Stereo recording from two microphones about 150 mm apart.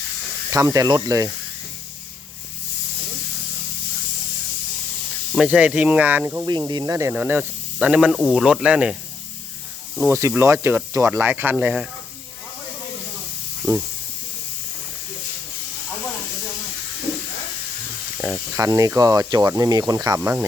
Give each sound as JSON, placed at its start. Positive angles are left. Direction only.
{"t": 0.5, "sound": "speech", "side_deg": -25}
{"t": 5.3, "sound": "speech", "side_deg": -5}
{"t": 10.1, "sound": "speech", "side_deg": -20}
{"t": 18.2, "sound": "speech", "side_deg": -15}